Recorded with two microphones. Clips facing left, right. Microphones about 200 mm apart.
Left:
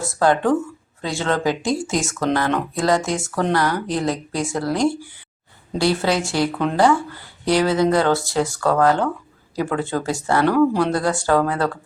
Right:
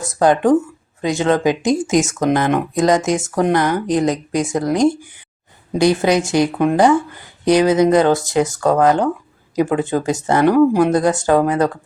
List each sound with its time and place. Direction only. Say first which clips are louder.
0.0 s speech: right 4 dB; 20° right (ahead or behind)